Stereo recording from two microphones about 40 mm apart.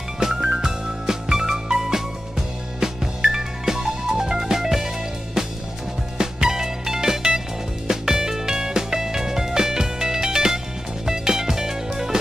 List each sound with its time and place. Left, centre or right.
0.2 s music: centre